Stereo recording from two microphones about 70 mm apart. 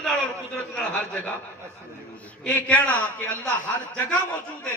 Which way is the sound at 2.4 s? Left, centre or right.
Left.